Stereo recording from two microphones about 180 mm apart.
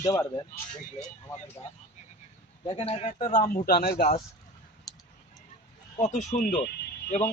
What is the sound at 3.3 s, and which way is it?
Speech, 50° left (ahead or behind).